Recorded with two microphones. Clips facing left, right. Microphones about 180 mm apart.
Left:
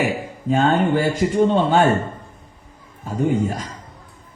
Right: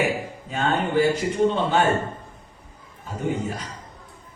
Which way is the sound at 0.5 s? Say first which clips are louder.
Left 5 dB; 50° left (ahead or behind).